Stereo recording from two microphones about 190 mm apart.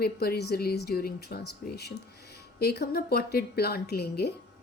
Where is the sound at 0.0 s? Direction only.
55° left (ahead or behind).